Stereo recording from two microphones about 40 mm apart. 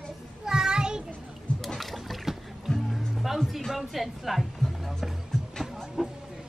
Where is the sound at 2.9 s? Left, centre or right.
Centre.